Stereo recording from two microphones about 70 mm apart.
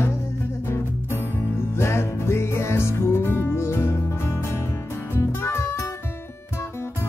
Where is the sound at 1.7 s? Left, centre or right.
Left.